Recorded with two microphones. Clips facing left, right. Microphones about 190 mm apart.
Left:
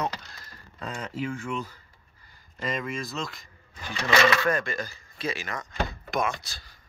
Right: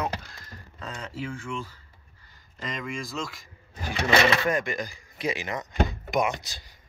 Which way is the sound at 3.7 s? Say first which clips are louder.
Right 4 dB; 40° right (ahead or behind).